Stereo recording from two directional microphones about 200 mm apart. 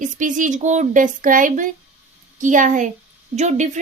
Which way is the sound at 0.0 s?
40° right (ahead or behind).